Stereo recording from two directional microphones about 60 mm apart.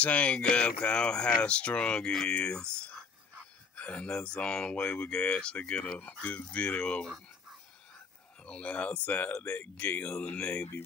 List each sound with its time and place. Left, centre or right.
0.0 s speech: left
3.7 s speech: left
8.5 s speech: left